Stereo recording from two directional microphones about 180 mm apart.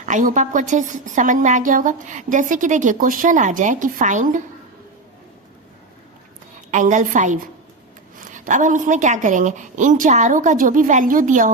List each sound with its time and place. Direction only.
0.0 s a woman's voice: 45° right (ahead or behind)
6.7 s a woman's voice: 45° right (ahead or behind)